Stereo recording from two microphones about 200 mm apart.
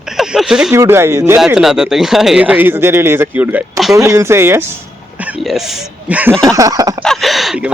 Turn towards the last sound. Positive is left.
turn(degrees=0)  # may be behind; listen again after turning